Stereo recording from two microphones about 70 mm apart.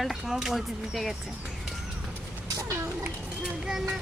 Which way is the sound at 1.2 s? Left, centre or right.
Centre.